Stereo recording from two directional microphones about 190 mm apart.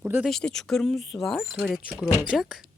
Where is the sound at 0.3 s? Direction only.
Centre (ahead or behind).